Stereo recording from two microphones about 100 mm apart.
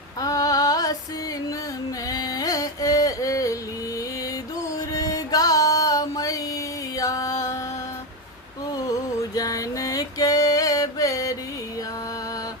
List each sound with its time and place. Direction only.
0.2 s female singing: 40° left (ahead or behind)
2.0 s carnatic music: 35° left (ahead or behind)
4.9 s music: 35° left (ahead or behind)
8.7 s music: 40° left (ahead or behind)